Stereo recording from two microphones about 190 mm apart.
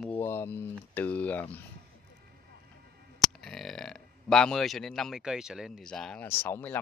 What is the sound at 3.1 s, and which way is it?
Speech, centre (ahead or behind).